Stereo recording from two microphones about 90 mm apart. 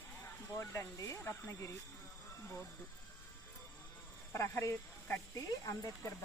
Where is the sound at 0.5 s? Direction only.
30° left (ahead or behind).